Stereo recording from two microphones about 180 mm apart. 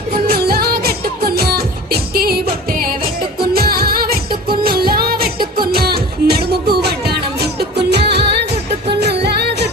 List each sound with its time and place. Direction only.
0.3 s music: 60° right (ahead or behind)